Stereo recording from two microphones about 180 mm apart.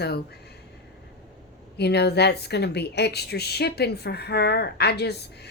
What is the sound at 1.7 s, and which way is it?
Speech, 65° left (ahead or behind).